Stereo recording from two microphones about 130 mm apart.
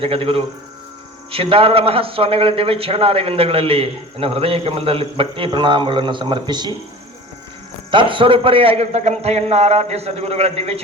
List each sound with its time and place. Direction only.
0.0 s a man's voice: 45° right (ahead or behind)
7.9 s a man's voice: 40° right (ahead or behind)